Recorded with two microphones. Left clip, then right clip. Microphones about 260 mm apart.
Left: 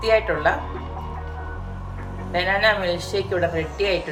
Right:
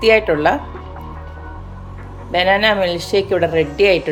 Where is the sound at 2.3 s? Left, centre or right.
Right.